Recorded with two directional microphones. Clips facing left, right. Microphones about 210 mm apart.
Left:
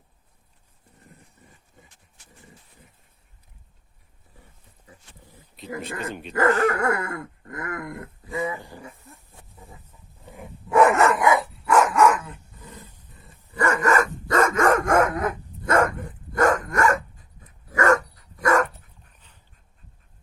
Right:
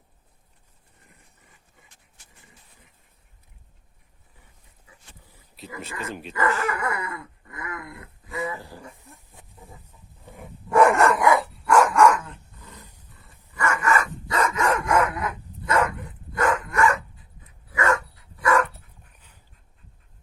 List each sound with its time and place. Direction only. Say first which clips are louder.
6.1 s speech: left 1 dB; 5° right (ahead or behind)
6.3 s dog: left 6 dB; 45° left (ahead or behind)
8.2 s a sound: left 2 dB; 30° left (ahead or behind)
9.0 s wild animals: left 1 dB; 15° right (ahead or behind)
10.3 s dog: left 1 dB; centre (ahead or behind)
13.5 s dog: left 3 dB; 35° left (ahead or behind)